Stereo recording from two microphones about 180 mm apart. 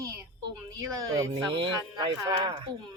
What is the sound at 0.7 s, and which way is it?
A woman's voice, 20° right (ahead or behind).